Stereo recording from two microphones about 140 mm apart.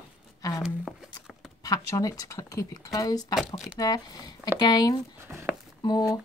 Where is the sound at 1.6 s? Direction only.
25° left (ahead or behind).